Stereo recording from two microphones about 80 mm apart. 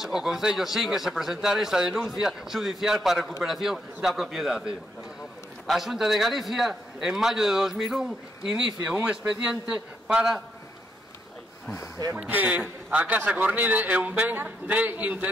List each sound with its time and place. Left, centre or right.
0.0 s speech: centre
12.3 s a man's voice: centre